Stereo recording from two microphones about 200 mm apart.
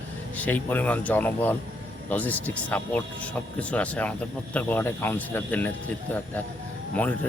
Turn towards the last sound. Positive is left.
turn(degrees=5)  # may be behind; listen again after turning